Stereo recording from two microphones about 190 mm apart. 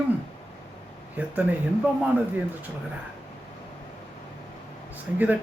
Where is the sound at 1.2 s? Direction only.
10° right (ahead or behind).